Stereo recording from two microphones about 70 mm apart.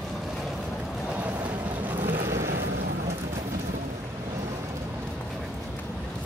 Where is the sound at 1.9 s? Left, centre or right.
Right.